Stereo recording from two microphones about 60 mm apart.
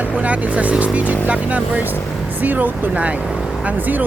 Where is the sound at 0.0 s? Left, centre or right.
Right.